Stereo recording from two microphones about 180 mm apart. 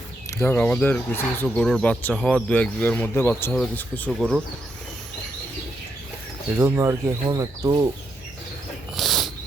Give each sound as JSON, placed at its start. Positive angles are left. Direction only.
{"t": 0.3, "sound": "speech", "side_deg": 15}
{"t": 6.6, "sound": "speech", "side_deg": -15}
{"t": 9.0, "sound": "a sound", "side_deg": 0}